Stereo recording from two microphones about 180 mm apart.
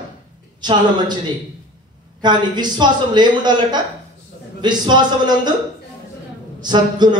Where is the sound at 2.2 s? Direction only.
25° right (ahead or behind).